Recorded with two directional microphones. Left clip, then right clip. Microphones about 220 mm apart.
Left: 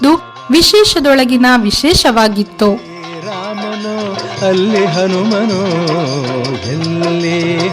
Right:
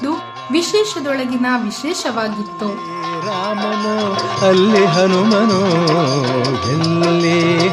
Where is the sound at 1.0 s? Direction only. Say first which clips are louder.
Left 10 dB; 45° left (ahead or behind).